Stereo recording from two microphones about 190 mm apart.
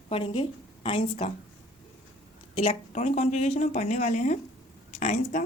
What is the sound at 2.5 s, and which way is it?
Speech, 35° left (ahead or behind).